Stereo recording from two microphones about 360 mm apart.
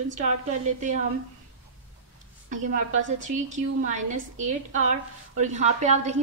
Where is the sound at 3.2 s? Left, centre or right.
Right.